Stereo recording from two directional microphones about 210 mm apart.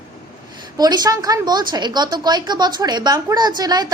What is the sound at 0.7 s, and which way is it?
A woman's voice, 20° right (ahead or behind).